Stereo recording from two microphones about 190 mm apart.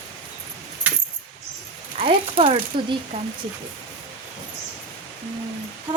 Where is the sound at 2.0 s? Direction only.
30° right (ahead or behind).